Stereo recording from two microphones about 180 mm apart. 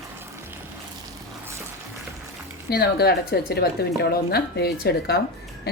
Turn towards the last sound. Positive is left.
turn(degrees=60)  # may be behind; listen again after turning